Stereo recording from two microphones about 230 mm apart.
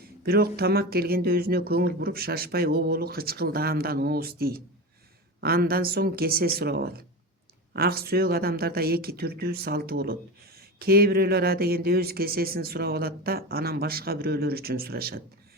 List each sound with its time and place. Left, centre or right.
0.0 s speech: right